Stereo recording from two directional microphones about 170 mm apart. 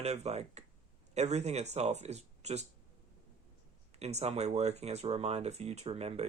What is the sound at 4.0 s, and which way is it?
Speech, 40° right (ahead or behind).